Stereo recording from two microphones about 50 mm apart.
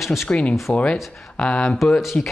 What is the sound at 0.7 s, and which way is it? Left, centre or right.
Speech, left.